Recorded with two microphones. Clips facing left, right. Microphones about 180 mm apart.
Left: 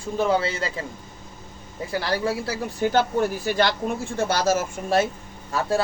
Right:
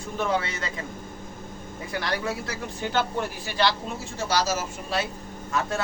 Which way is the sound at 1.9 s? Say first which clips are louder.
Left 4 dB; 30° left (ahead or behind).